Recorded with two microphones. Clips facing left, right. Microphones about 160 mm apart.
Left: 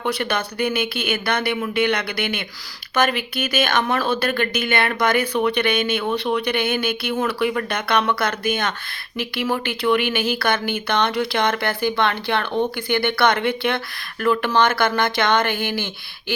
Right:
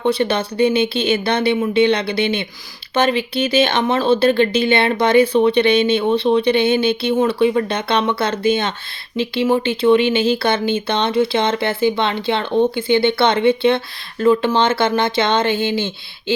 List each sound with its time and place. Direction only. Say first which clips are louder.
0.0 s speech: right 6 dB; 25° right (ahead or behind)